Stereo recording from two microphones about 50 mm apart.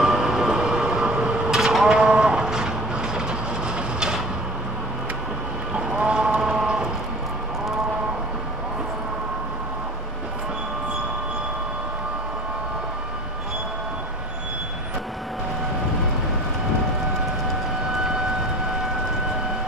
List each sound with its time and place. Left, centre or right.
0.0 s vehicle: centre
5.8 s clip-clop: centre